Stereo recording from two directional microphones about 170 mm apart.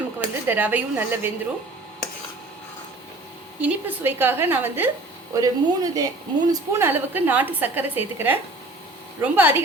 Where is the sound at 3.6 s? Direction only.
10° right (ahead or behind).